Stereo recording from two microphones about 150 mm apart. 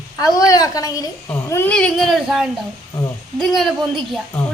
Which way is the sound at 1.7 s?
5° left (ahead or behind).